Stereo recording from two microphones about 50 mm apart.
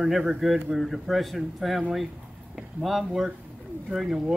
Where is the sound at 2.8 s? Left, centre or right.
Centre.